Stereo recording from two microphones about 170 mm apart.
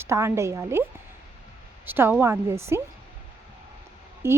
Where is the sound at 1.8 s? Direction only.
10° right (ahead or behind).